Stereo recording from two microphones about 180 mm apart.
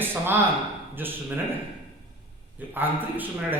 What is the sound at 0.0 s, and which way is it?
Speech, 10° right (ahead or behind).